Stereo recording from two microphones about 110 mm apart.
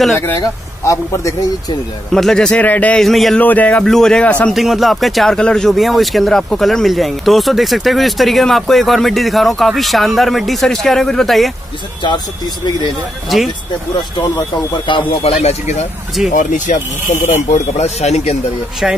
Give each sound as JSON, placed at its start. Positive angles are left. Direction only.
{"t": 0.4, "sound": "speech", "side_deg": 30}
{"t": 2.1, "sound": "a man's voice", "side_deg": 5}
{"t": 3.0, "sound": "speech", "side_deg": 0}
{"t": 3.3, "sound": "a man's voice", "side_deg": 15}
{"t": 4.6, "sound": "speech", "side_deg": 0}
{"t": 13.3, "sound": "speech", "side_deg": -5}
{"t": 14.9, "sound": "speech", "side_deg": 50}
{"t": 15.4, "sound": "speech", "side_deg": 90}
{"t": 16.2, "sound": "speech", "side_deg": -5}
{"t": 17.1, "sound": "speech", "side_deg": 85}
{"t": 18.8, "sound": "speech", "side_deg": -5}